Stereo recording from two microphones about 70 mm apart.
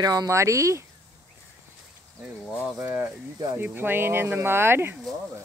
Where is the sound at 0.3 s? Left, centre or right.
Right.